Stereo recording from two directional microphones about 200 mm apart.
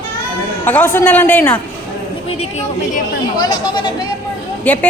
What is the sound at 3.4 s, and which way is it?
Speech, 20° left (ahead or behind).